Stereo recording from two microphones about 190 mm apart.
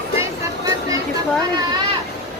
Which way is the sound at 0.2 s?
15° right (ahead or behind).